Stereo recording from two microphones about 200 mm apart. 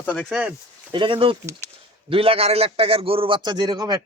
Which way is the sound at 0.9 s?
25° right (ahead or behind).